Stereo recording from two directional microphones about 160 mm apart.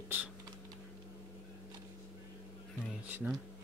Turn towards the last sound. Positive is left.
turn(degrees=-10)  # may be behind; listen again after turning